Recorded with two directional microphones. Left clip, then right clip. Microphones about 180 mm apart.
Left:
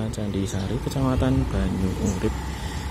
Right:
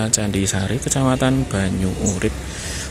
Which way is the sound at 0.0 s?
15° right (ahead or behind).